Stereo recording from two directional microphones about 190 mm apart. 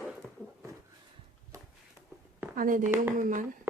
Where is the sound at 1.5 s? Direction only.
15° right (ahead or behind).